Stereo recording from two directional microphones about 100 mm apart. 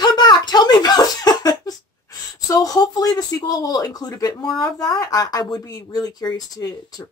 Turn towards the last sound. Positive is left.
turn(degrees=40)  # may be behind; listen again after turning